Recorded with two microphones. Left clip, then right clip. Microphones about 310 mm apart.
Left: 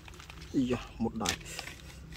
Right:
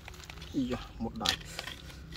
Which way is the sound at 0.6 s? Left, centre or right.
Left.